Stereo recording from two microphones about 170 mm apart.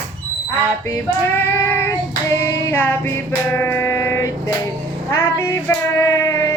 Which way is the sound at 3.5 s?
15° left (ahead or behind).